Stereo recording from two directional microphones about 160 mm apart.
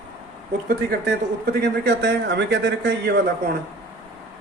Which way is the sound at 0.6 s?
75° right (ahead or behind).